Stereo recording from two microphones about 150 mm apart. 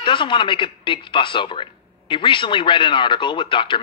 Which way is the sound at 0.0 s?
35° left (ahead or behind).